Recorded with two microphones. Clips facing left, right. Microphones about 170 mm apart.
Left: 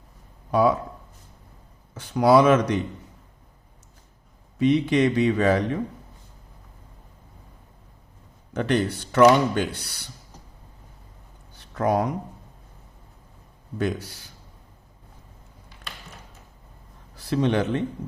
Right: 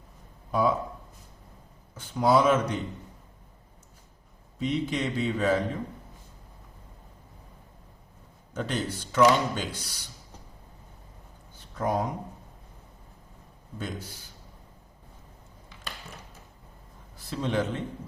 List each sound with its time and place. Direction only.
2.0 s speech: 70° left (ahead or behind)
4.5 s speech: 70° left (ahead or behind)
8.5 s a man's voice: 70° left (ahead or behind)
11.5 s a sound: 70° left (ahead or behind)
13.7 s speech: 70° left (ahead or behind)
17.2 s a man's voice: 75° left (ahead or behind)